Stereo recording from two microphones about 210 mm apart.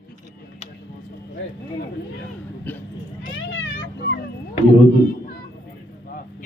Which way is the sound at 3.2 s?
60° left (ahead or behind).